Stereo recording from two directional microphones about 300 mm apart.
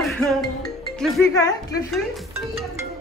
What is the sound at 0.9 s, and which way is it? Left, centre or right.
Speech, centre.